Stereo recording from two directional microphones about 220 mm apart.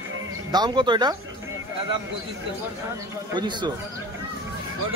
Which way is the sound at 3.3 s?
20° right (ahead or behind).